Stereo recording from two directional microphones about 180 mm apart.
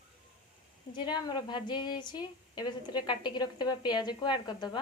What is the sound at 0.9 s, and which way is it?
Speech, 25° left (ahead or behind).